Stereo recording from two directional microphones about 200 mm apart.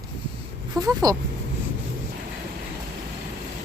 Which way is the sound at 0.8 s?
15° right (ahead or behind).